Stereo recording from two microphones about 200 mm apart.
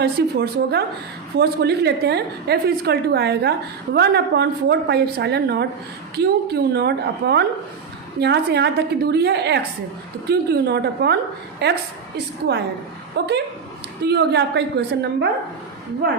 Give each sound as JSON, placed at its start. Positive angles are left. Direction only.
{"t": 0.0, "sound": "a woman's voice", "side_deg": -50}